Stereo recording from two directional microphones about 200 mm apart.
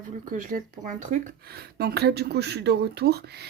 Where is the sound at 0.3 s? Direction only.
45° right (ahead or behind).